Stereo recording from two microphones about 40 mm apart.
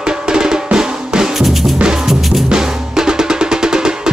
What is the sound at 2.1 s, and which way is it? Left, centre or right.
Music, centre.